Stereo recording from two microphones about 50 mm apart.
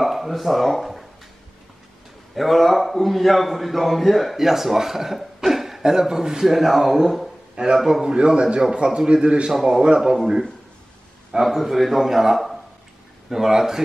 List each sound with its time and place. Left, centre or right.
0.0 s speech: centre
2.3 s a man's voice: centre
7.5 s a man's voice: centre
11.4 s a man's voice: centre